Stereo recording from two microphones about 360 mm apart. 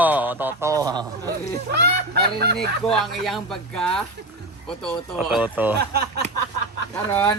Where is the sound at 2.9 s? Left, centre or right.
Centre.